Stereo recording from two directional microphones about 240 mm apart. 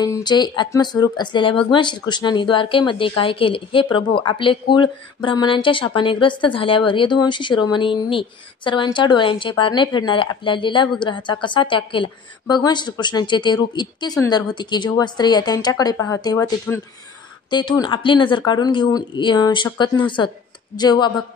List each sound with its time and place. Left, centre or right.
0.0 s a woman's voice: centre